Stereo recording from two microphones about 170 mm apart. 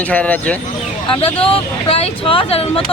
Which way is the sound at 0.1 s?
10° left (ahead or behind).